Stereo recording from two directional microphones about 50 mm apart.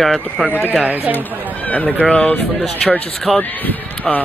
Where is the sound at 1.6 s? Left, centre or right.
Left.